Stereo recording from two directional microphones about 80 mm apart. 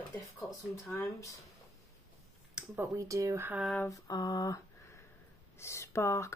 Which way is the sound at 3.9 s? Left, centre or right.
Left.